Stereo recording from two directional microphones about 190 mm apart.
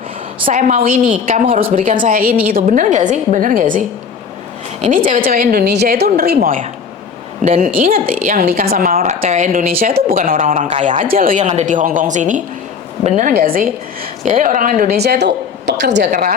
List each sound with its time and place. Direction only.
0.4 s a woman's voice: 40° right (ahead or behind); by 16.0 s 65° right (ahead or behind)